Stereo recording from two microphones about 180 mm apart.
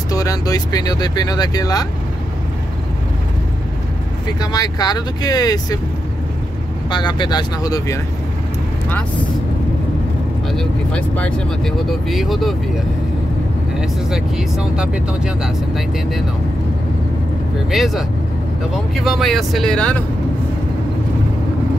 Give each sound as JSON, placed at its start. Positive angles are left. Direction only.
{"t": 0.1, "sound": "speech", "side_deg": 20}
{"t": 4.4, "sound": "speech", "side_deg": 20}
{"t": 6.9, "sound": "speech", "side_deg": 25}
{"t": 10.5, "sound": "speech", "side_deg": 5}
{"t": 13.7, "sound": "speech", "side_deg": -5}
{"t": 17.6, "sound": "speech", "side_deg": 0}